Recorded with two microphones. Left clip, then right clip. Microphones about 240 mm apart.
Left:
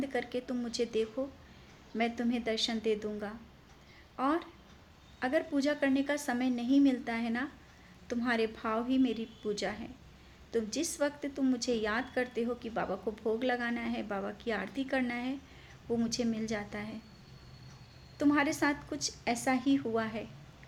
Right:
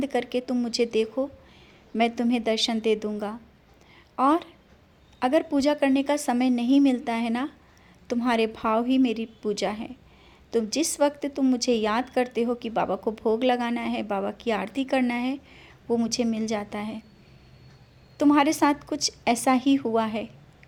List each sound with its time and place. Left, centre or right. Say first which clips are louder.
0.0 s a woman's voice: right 8 dB; right
18.2 s speech: right 9 dB; right